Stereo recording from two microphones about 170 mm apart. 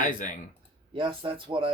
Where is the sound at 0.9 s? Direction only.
30° right (ahead or behind).